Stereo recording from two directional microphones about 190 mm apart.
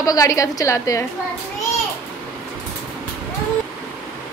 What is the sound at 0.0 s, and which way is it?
A woman's voice, 20° left (ahead or behind).